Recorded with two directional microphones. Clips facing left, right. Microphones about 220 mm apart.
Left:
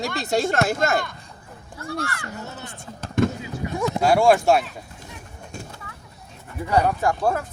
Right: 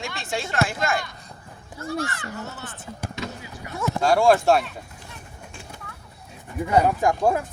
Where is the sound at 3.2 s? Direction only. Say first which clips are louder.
Left 14 dB; 50° left (ahead or behind).